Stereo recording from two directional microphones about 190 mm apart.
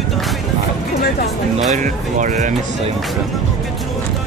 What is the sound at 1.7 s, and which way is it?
Speech, 40° right (ahead or behind).